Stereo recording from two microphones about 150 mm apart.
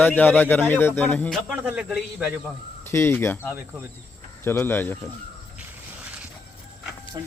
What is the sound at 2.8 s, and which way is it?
Speech, 15° left (ahead or behind).